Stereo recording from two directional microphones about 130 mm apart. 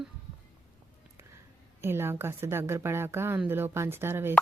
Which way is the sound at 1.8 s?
20° right (ahead or behind).